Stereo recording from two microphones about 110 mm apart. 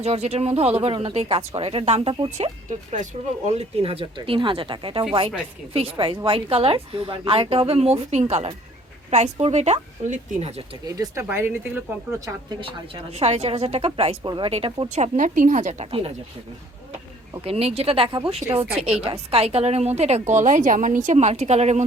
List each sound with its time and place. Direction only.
0.0 s a woman's voice: 75° right (ahead or behind); by 2.5 s 55° right (ahead or behind)
2.9 s speech: 90° right; by 4.0 s 65° right (ahead or behind)
4.0 s a woman's voice: 50° right (ahead or behind); by 10.5 s 80° right
10.8 s speech: 30° right (ahead or behind)
12.5 s a woman's voice: 55° right (ahead or behind)
14.3 s speech: 45° right (ahead or behind)
14.5 s speech: 60° right (ahead or behind); by 15.9 s 90° right
15.9 s a woman's voice: 55° right (ahead or behind)
17.4 s a woman's voice: 65° right (ahead or behind)
18.4 s speech: 20° right (ahead or behind)
18.8 s a woman's voice: 60° right (ahead or behind); by 21.8 s 85° right